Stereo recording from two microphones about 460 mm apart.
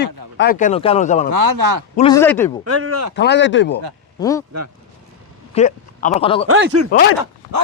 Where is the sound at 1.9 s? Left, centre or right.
Centre.